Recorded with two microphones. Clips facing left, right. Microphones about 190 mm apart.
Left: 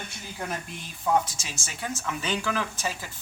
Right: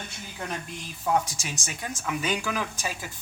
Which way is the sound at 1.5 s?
15° right (ahead or behind).